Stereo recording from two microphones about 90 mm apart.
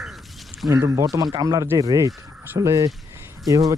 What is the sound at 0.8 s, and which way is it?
Speech, 35° right (ahead or behind).